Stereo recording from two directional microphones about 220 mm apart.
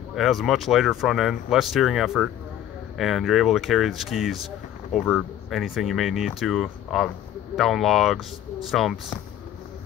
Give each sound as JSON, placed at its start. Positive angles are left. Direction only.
{"t": 0.1, "sound": "speech", "side_deg": 0}